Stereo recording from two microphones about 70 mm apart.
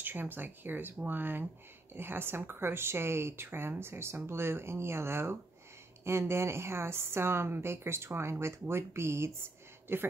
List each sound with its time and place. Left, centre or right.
0.0 s a woman's voice: right